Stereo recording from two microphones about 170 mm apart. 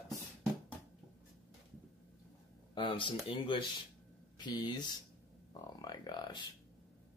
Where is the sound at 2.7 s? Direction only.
30° left (ahead or behind).